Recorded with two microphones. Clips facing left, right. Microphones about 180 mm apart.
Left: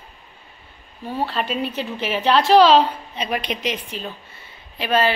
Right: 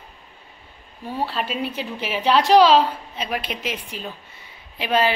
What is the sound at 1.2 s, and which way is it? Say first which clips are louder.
A woman's voice: left 2 dB; 5° right (ahead or behind).